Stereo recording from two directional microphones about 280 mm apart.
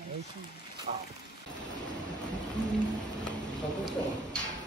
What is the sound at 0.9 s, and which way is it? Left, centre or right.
Speech, right.